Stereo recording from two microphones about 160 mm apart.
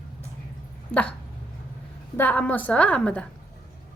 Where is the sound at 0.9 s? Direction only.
5° left (ahead or behind).